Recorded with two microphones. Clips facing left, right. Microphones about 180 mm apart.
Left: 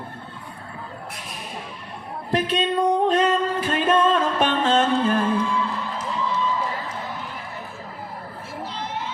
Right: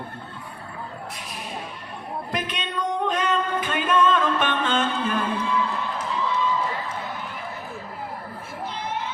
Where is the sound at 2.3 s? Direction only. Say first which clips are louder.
Left 10 dB; 35° left (ahead or behind).